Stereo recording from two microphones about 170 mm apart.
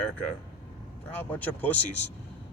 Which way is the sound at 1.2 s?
10° left (ahead or behind).